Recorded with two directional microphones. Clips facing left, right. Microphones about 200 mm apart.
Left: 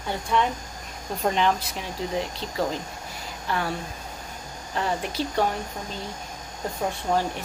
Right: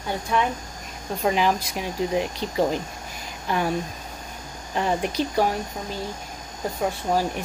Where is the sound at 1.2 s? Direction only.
5° right (ahead or behind).